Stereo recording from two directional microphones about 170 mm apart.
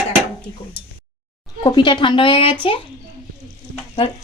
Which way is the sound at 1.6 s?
25° left (ahead or behind).